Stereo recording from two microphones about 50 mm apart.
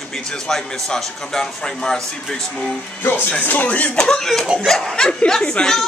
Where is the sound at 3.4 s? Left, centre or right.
Left.